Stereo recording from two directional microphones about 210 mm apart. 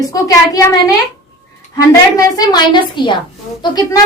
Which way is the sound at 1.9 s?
20° left (ahead or behind).